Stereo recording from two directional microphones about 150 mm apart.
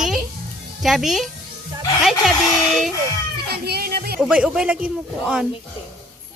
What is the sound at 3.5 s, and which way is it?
Speech, 90° right.